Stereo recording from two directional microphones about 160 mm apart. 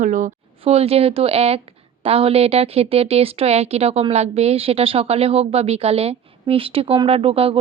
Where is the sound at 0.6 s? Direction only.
40° right (ahead or behind).